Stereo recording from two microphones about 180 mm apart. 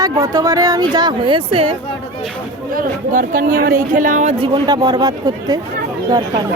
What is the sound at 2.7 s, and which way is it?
Speech, 50° right (ahead or behind).